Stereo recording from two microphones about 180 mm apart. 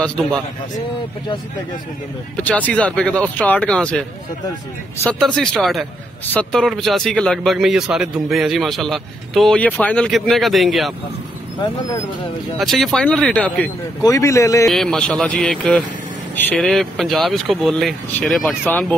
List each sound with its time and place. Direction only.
0.0 s speech: 5° left (ahead or behind)
2.3 s speech: 10° left (ahead or behind)
5.2 s speech: 5° left (ahead or behind)
12.5 s speech: centre (ahead or behind)
14.0 s speech: 20° left (ahead or behind)
14.7 s speech: centre (ahead or behind)
18.7 s speech: 10° left (ahead or behind)